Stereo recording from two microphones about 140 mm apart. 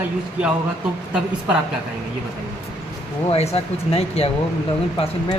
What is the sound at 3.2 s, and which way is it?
Speech, 45° left (ahead or behind).